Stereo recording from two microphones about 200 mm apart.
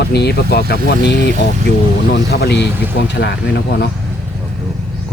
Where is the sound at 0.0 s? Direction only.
55° left (ahead or behind).